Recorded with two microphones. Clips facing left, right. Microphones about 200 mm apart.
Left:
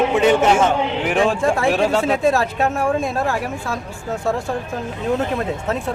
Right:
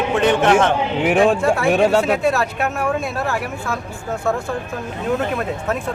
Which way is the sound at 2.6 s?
30° left (ahead or behind).